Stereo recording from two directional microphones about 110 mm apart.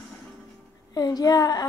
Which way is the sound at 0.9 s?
35° left (ahead or behind).